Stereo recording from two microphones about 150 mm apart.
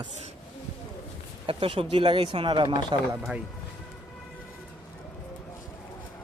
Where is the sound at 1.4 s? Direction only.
35° right (ahead or behind).